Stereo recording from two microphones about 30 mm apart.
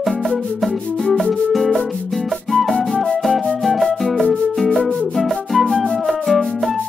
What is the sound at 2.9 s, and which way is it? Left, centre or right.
Music, centre.